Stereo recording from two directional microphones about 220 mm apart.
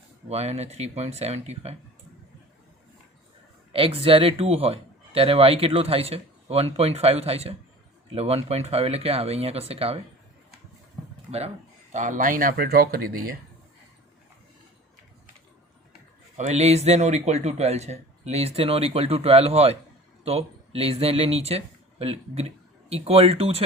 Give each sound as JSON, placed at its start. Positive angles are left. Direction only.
{"t": 0.3, "sound": "speech", "side_deg": -30}
{"t": 3.7, "sound": "speech", "side_deg": -25}
{"t": 11.3, "sound": "speech", "side_deg": -30}
{"t": 16.5, "sound": "speech", "side_deg": -30}